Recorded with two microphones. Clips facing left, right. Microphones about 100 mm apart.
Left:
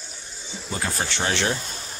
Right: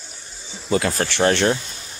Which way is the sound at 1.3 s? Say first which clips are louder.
Right 7 dB; 50° right (ahead or behind).